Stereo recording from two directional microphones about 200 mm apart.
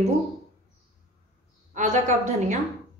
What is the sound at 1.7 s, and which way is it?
Speech, 40° right (ahead or behind).